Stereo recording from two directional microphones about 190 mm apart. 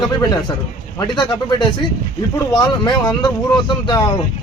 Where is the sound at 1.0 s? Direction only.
25° left (ahead or behind).